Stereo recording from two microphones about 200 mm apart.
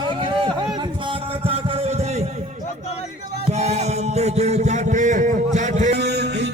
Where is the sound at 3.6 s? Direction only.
35° right (ahead or behind).